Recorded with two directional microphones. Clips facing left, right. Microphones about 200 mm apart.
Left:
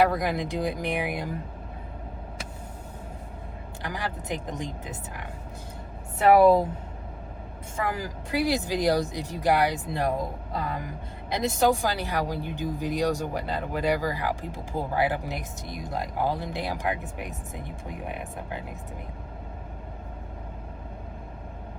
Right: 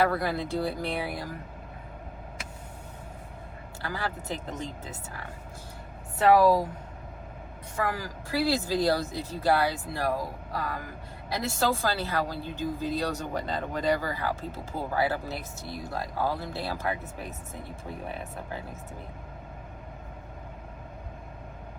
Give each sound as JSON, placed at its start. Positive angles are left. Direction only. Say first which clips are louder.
{"t": 0.0, "sound": "speech", "louder": "left 3 dB", "side_deg": 15}
{"t": 3.8, "sound": "speech", "louder": "left 1 dB", "side_deg": 15}
{"t": 7.8, "sound": "speech", "louder": "left 1 dB", "side_deg": 20}